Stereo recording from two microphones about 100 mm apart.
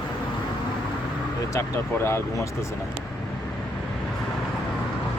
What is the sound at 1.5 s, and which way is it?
Speech, 25° left (ahead or behind).